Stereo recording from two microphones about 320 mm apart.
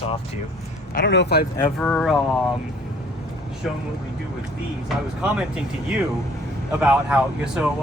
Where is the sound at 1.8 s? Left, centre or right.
Centre.